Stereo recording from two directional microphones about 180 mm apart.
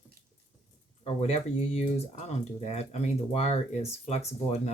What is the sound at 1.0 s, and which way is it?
Speech, 35° left (ahead or behind).